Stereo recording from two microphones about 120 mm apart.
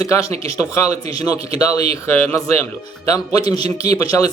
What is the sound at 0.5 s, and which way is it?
A man's voice, 25° left (ahead or behind).